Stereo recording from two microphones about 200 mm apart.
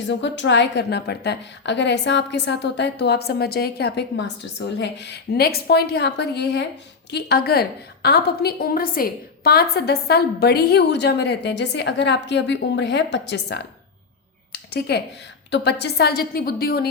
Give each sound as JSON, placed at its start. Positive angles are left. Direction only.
{"t": 0.1, "sound": "a woman's voice", "side_deg": 60}
{"t": 14.5, "sound": "a sound", "side_deg": 55}
{"t": 15.4, "sound": "a woman's voice", "side_deg": 60}